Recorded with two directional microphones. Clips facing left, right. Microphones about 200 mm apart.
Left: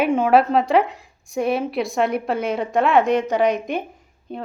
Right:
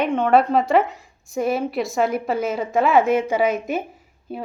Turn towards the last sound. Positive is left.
turn(degrees=-5)  # may be behind; listen again after turning